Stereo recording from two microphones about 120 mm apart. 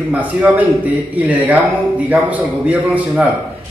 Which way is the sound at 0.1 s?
15° right (ahead or behind).